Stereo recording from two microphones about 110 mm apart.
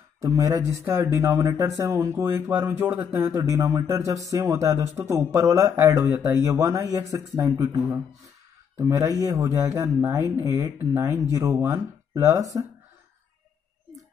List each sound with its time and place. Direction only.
0.2 s speech: 30° right (ahead or behind)